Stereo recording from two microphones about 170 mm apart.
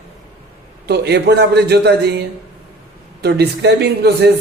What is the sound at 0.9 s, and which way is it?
A man's voice, 75° right (ahead or behind).